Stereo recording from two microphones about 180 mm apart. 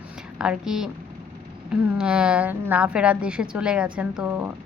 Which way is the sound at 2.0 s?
5° right (ahead or behind).